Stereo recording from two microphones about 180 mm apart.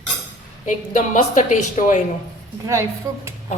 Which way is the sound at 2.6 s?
15° right (ahead or behind).